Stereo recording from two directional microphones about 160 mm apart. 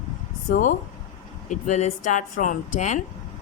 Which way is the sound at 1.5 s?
45° left (ahead or behind).